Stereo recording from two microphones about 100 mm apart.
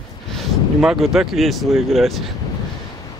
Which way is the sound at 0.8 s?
5° right (ahead or behind).